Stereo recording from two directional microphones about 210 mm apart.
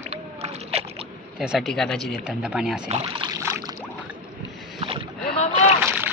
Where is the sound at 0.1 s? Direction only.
30° right (ahead or behind).